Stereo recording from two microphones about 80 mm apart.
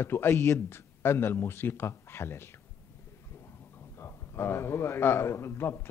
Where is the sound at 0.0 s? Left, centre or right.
Left.